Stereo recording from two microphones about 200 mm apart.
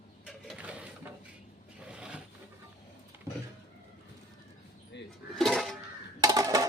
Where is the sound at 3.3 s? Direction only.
15° right (ahead or behind).